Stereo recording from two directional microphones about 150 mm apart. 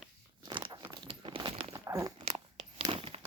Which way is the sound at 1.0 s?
35° right (ahead or behind).